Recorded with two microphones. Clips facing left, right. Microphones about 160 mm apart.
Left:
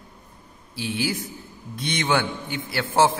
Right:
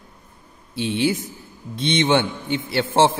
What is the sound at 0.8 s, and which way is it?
A man's voice, 25° right (ahead or behind).